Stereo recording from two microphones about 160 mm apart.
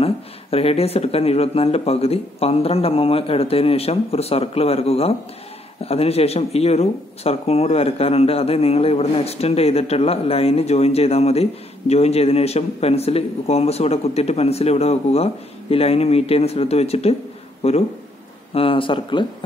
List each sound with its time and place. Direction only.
0.0 s speech: 40° left (ahead or behind)